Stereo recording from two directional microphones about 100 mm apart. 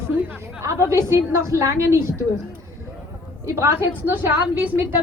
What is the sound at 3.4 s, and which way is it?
Speech, 25° right (ahead or behind).